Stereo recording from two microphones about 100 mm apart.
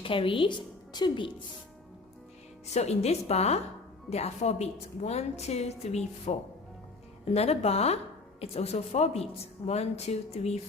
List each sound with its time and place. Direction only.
0.0 s a woman's voice: 60° left (ahead or behind)
2.8 s speech: 90° left